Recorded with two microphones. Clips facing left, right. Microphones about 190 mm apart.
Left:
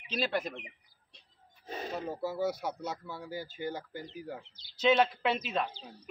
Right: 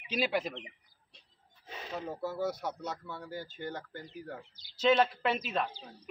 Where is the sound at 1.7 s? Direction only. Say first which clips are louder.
Left 5 dB; 40° left (ahead or behind).